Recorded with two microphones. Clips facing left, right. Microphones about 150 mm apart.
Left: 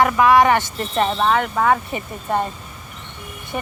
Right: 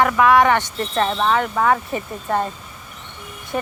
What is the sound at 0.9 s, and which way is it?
Speech, 20° left (ahead or behind).